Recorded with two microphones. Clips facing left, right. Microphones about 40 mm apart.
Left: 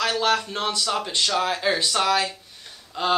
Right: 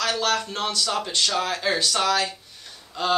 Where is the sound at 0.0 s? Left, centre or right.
Centre.